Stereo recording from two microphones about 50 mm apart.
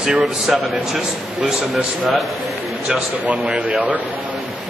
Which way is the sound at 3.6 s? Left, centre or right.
Right.